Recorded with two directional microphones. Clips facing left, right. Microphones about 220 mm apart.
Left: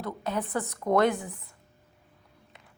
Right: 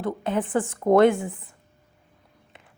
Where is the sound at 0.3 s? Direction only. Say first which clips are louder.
Right 5 dB; 30° right (ahead or behind).